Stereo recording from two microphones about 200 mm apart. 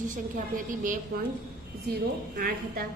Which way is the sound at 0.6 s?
40° right (ahead or behind).